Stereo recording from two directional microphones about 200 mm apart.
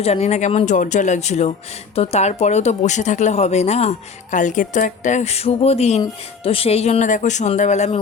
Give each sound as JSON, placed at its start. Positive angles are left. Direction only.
{"t": 0.0, "sound": "speech", "side_deg": 30}